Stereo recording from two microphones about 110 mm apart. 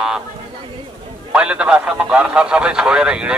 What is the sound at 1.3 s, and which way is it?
A man's voice, 10° right (ahead or behind).